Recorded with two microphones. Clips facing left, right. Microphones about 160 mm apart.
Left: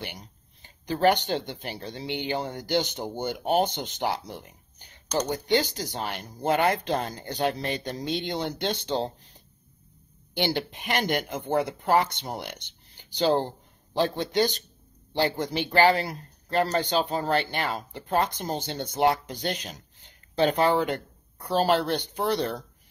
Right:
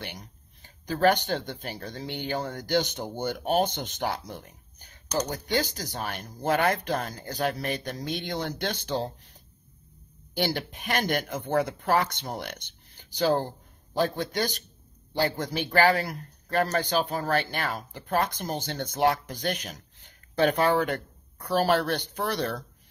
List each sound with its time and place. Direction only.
0.0 s speech: 15° left (ahead or behind)
10.3 s speech: 20° left (ahead or behind)